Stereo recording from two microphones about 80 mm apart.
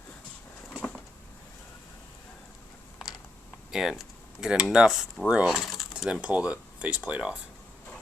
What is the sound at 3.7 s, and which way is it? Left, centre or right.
Speech, centre.